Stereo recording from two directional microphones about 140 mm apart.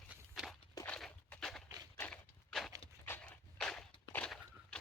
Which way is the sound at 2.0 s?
10° left (ahead or behind).